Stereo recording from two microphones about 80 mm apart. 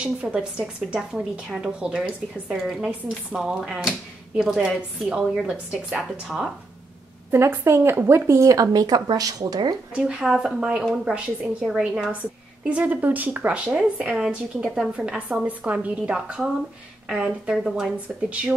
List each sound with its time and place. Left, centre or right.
0.0 s speech: centre
2.6 s a woman's voice: centre
7.2 s speech: right
9.9 s speech: centre